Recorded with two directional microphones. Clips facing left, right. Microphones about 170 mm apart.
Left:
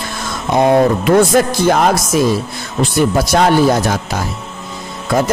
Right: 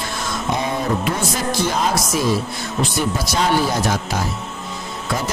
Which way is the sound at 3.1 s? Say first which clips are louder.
Left 8 dB; 55° left (ahead or behind).